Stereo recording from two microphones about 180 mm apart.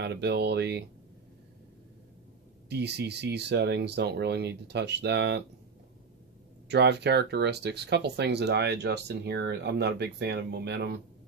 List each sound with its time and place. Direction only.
0.0 s speech: 70° right (ahead or behind)
2.7 s speech: 70° right (ahead or behind)
6.7 s speech: 70° right (ahead or behind)